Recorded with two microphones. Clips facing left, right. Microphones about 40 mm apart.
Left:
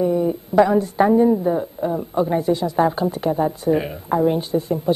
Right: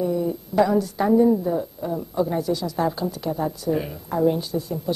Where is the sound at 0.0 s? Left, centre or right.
Left.